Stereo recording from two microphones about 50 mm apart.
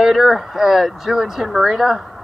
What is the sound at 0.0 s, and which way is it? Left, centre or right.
Speech, centre.